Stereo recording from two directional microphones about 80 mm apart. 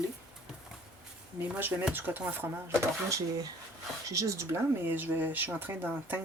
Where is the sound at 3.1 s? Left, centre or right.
Right.